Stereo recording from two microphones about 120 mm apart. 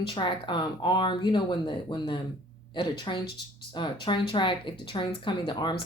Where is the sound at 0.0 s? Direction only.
45° left (ahead or behind).